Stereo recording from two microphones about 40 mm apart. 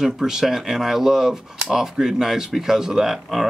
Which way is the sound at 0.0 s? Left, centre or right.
Centre.